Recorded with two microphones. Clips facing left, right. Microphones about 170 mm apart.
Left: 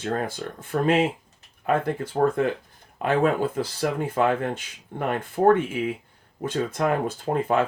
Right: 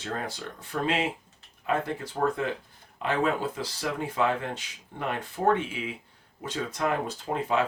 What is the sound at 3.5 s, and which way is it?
Speech, 50° left (ahead or behind).